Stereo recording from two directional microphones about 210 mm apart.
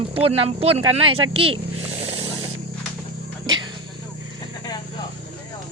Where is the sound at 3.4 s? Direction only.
20° right (ahead or behind).